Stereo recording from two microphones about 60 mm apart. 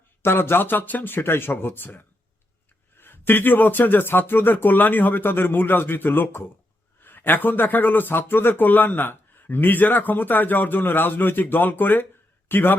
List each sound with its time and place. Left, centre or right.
0.2 s speech: left
3.0 s a man's voice: left